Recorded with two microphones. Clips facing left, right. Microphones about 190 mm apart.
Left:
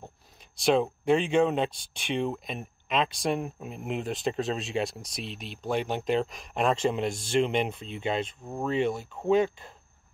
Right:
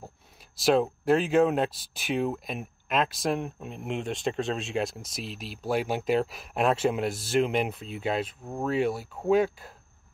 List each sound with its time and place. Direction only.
0.0 s speech: 5° right (ahead or behind)